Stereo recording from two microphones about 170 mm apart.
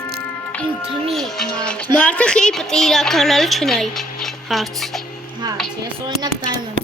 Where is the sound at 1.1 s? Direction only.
5° left (ahead or behind).